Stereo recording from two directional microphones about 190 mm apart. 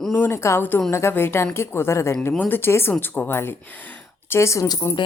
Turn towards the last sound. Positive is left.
turn(degrees=20)  # may be behind; listen again after turning